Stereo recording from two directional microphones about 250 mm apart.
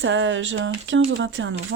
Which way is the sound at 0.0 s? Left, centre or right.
Right.